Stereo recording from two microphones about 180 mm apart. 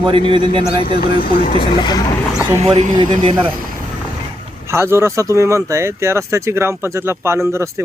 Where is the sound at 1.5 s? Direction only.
25° left (ahead or behind).